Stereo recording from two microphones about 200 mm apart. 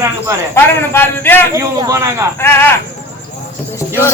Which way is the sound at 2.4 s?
10° left (ahead or behind).